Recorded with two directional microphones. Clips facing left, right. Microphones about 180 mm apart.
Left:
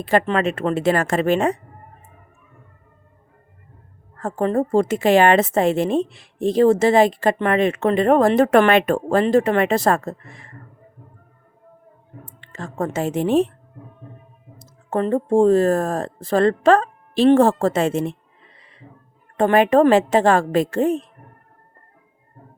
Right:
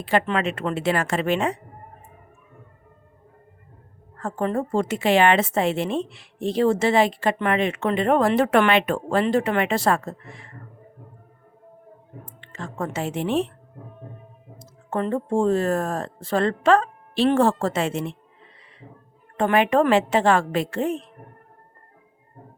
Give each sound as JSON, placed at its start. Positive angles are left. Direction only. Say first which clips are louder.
{"t": 0.0, "sound": "a woman's voice", "louder": "left 4 dB", "side_deg": 40}
{"t": 4.2, "sound": "a woman's voice", "louder": "left 5 dB", "side_deg": 40}
{"t": 12.4, "sound": "speech", "louder": "left 4 dB", "side_deg": 40}
{"t": 14.6, "sound": "speech", "louder": "left 4 dB", "side_deg": 40}
{"t": 19.4, "sound": "speech", "louder": "left 5 dB", "side_deg": 40}